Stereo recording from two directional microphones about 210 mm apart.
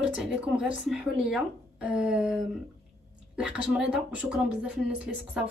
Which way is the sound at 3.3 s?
5° right (ahead or behind).